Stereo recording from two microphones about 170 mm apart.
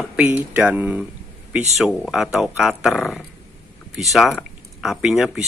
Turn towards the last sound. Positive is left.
turn(degrees=-5)  # may be behind; listen again after turning